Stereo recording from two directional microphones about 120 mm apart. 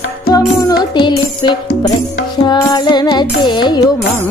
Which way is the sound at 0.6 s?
35° left (ahead or behind).